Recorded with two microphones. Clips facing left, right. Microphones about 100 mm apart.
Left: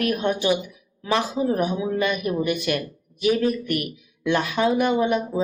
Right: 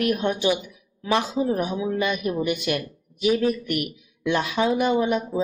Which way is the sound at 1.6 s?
15° left (ahead or behind).